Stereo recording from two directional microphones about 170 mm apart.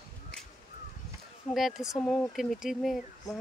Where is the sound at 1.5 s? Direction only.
Centre (ahead or behind).